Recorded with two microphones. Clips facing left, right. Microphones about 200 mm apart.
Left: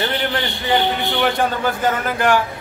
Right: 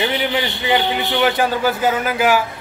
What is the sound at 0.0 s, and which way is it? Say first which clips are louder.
A man's voice: right 2 dB; 10° right (ahead or behind).